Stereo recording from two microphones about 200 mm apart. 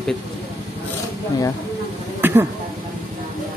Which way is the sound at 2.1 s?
10° right (ahead or behind).